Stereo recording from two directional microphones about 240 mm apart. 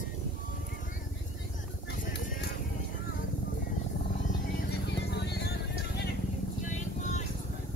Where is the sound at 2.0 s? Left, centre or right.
Left.